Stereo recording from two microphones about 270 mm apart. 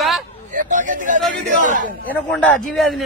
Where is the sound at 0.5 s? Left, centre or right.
Right.